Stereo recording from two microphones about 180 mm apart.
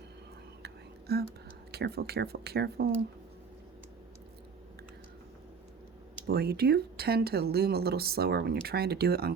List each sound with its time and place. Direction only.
0.6 s whispering: 60° right (ahead or behind)
1.7 s speech: 60° right (ahead or behind)
6.2 s speech: 60° right (ahead or behind)